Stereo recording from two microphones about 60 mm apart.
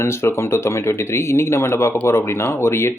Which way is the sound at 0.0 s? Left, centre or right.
Left.